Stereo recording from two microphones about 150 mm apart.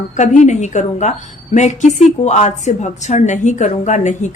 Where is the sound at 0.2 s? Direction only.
55° left (ahead or behind).